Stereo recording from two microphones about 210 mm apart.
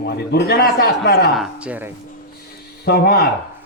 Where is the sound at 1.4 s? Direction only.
5° right (ahead or behind).